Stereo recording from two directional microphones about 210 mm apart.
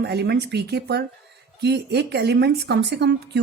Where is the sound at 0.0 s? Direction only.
50° right (ahead or behind).